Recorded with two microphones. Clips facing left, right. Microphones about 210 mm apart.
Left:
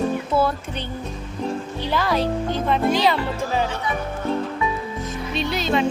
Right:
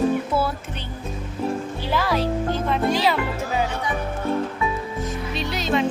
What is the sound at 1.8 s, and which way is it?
Speech, 5° right (ahead or behind).